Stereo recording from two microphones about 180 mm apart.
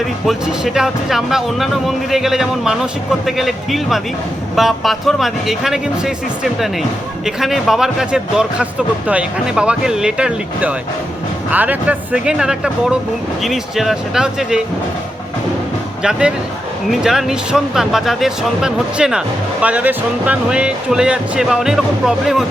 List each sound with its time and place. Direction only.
0.3 s speech: 5° right (ahead or behind)
16.0 s speech: 5° right (ahead or behind)